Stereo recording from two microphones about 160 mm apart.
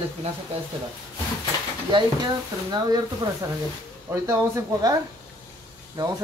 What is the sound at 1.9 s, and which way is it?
Speech, 30° right (ahead or behind).